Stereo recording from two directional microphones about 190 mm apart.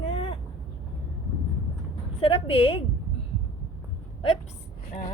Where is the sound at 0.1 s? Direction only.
30° left (ahead or behind).